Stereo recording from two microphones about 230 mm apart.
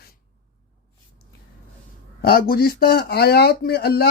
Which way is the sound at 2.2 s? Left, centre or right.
Left.